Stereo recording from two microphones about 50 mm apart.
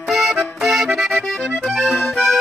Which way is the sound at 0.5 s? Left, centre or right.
Centre.